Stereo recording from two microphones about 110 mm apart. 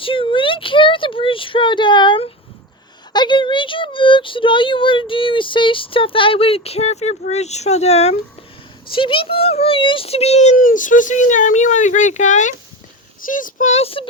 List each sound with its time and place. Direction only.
0.0 s a sound: 55° left (ahead or behind)
3.1 s speech: 45° left (ahead or behind); by 8.1 s 75° left (ahead or behind)
8.9 s speech: 50° left (ahead or behind); by 12.5 s 90° left
13.7 s speech: 70° left (ahead or behind)